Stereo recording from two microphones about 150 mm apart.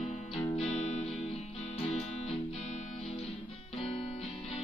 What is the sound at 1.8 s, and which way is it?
Music, 40° left (ahead or behind).